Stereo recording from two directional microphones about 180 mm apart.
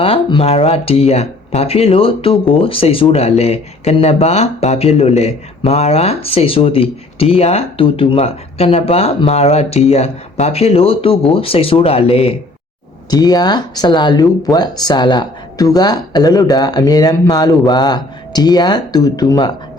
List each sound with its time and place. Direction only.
0.0 s speech: 30° left (ahead or behind)
13.1 s speech: 20° left (ahead or behind)